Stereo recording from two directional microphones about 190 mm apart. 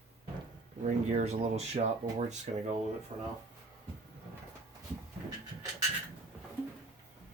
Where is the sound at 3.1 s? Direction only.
25° right (ahead or behind).